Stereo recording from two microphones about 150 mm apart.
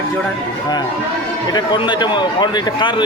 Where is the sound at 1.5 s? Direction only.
30° left (ahead or behind).